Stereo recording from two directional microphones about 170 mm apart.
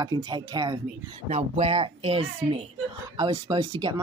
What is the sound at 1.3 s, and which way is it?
Speech, 40° right (ahead or behind).